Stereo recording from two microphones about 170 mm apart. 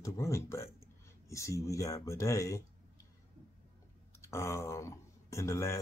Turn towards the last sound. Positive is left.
turn(degrees=20)  # may be behind; listen again after turning